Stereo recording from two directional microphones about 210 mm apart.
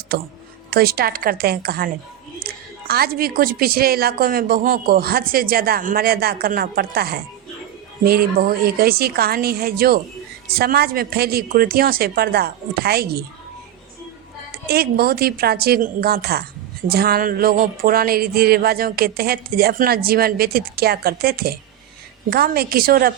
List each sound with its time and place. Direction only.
0.7 s a woman's voice: 45° right (ahead or behind)
14.7 s a woman's voice: 45° right (ahead or behind)